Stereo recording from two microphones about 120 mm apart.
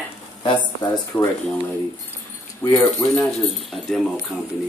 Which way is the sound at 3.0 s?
30° left (ahead or behind).